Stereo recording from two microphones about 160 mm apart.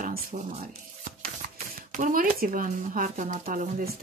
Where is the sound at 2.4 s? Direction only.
60° right (ahead or behind).